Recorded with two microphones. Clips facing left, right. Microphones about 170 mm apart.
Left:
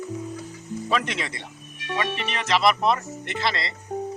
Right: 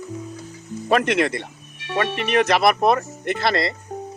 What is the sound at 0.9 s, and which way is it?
Music, 60° right (ahead or behind).